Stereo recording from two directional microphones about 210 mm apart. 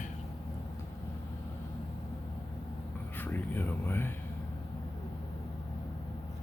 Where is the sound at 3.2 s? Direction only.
10° left (ahead or behind).